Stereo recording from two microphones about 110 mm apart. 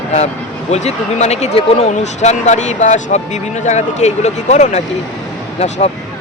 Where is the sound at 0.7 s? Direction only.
80° left.